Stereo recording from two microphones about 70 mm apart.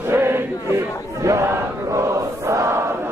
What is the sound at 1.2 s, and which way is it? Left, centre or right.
Chant, right.